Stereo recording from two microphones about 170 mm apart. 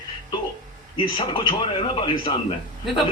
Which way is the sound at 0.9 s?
30° left (ahead or behind).